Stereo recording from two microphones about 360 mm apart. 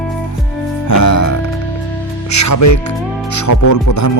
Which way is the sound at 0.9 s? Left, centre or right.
Left.